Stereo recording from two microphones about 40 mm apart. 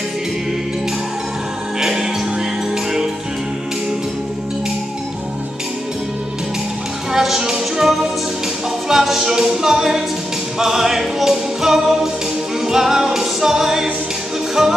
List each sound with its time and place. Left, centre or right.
1.8 s music: centre
7.1 s a sound: centre
7.7 s music: centre